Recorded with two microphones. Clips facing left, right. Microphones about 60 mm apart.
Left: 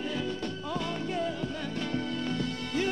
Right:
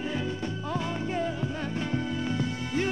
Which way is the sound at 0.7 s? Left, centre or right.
Right.